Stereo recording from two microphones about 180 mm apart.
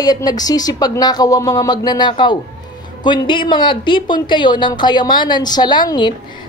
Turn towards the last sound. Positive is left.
turn(degrees=25)  # may be behind; listen again after turning